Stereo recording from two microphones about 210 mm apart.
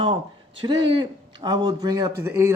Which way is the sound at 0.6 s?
20° right (ahead or behind).